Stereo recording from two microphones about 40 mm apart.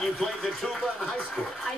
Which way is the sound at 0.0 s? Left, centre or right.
Centre.